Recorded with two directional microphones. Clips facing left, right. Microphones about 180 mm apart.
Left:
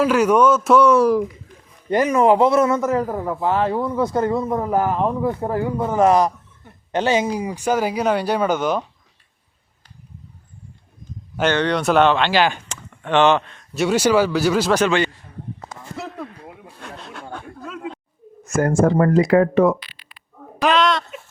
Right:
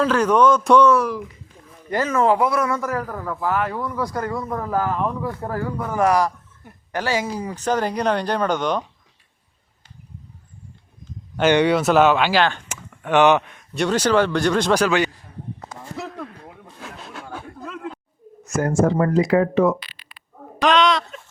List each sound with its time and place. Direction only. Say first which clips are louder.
0.0 s speech: left 1 dB; 10° left (ahead or behind)
1.9 s a man's voice: left 3 dB; 15° left (ahead or behind)
11.4 s speech: right 2 dB; 10° right (ahead or behind)
12.4 s speech: left 1 dB; 5° left (ahead or behind)
12.6 s a sound: even; 5° right (ahead or behind)
13.7 s speech: left 2 dB; 10° left (ahead or behind)
16.0 s a sound: left 1 dB; centre (ahead or behind)
18.4 s speech: left 2 dB; 50° left (ahead or behind)
20.6 s speech: even; 5° left (ahead or behind)